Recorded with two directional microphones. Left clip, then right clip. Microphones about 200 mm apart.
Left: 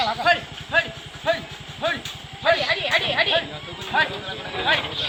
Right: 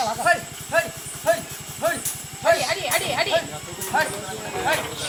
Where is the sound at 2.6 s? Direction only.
55° right (ahead or behind).